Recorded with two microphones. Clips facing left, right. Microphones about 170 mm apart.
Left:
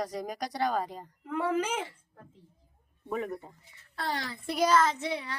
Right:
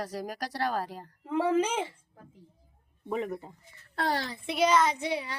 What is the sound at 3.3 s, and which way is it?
Speech, centre (ahead or behind).